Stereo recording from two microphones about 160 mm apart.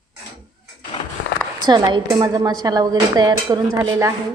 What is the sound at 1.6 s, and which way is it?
A woman's voice, 25° right (ahead or behind).